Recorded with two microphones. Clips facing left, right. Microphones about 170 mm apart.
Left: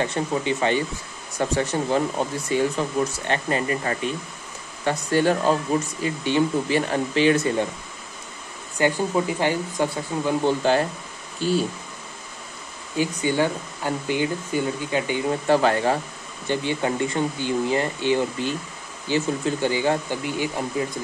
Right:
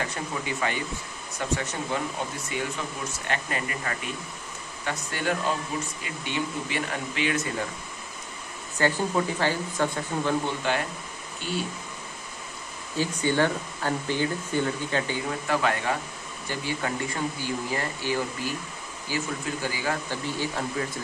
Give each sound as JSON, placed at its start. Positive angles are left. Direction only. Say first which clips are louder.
{"t": 0.0, "sound": "speech", "louder": "left 8 dB", "side_deg": 25}
{"t": 8.7, "sound": "speech", "louder": "left 3 dB", "side_deg": 15}
{"t": 10.4, "sound": "speech", "louder": "left 8 dB", "side_deg": 35}
{"t": 12.9, "sound": "speech", "louder": "left 3 dB", "side_deg": 15}
{"t": 16.4, "sound": "speech", "louder": "left 7 dB", "side_deg": 25}
{"t": 20.2, "sound": "speech", "louder": "left 3 dB", "side_deg": 15}